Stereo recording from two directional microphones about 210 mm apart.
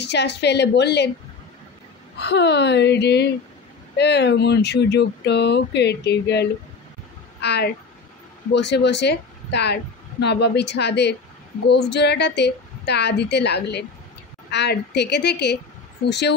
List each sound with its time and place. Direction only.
0.0 s speech: 55° left (ahead or behind)
2.1 s speech: 55° left (ahead or behind)